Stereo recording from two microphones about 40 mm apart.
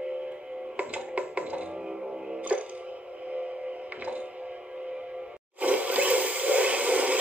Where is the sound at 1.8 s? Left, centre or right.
Right.